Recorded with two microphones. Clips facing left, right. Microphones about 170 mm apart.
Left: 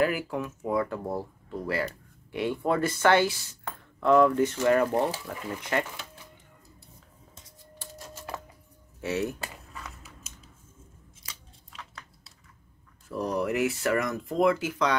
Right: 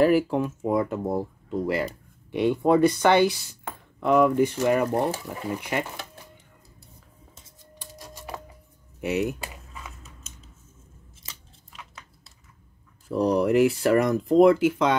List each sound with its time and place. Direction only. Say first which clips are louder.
0.3 s speech: right 5 dB; 25° right (ahead or behind); by 5.9 s 10° right (ahead or behind)
9.0 s a sound: right 4 dB; 15° right (ahead or behind)
11.3 s scissors: right 1 dB; 25° right (ahead or behind)
13.1 s speech: right 7 dB; 35° right (ahead or behind)